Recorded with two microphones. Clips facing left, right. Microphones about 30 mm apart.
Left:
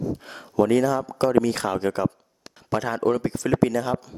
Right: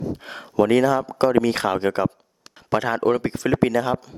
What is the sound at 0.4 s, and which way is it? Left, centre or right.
A man's voice, right.